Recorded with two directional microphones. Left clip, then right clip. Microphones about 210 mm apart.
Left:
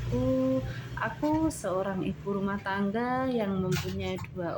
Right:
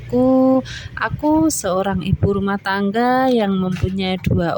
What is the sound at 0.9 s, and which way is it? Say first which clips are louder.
Speech: right 12 dB; 55° right (ahead or behind).